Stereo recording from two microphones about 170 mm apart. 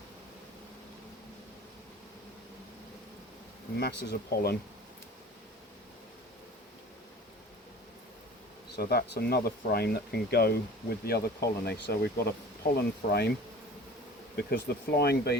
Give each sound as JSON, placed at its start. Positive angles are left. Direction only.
{"t": 3.8, "sound": "speech", "side_deg": 70}
{"t": 8.7, "sound": "speech", "side_deg": 70}
{"t": 14.3, "sound": "speech", "side_deg": 65}